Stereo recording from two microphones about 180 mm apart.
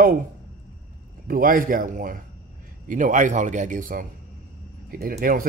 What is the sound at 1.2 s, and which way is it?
A man's voice, 50° right (ahead or behind).